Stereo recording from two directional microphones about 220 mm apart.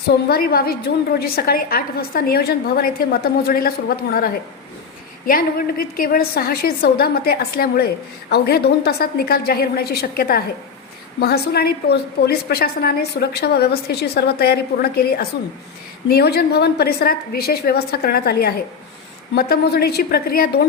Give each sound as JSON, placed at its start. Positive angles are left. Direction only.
{"t": 0.3, "sound": "a woman's voice", "side_deg": 45}